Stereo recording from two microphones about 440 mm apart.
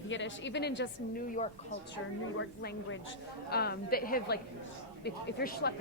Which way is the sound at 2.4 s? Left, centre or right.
Left.